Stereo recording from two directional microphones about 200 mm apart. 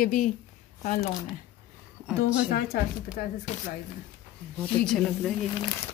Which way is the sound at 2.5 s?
50° left (ahead or behind).